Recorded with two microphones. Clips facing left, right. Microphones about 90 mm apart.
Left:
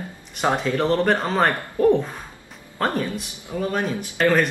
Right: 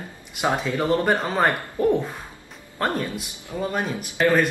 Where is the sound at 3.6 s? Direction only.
15° right (ahead or behind).